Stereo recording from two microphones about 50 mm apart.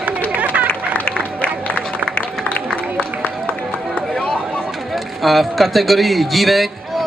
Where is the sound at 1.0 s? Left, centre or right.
Left.